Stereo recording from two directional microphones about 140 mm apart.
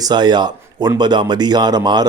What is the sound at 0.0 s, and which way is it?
Speech, 30° right (ahead or behind).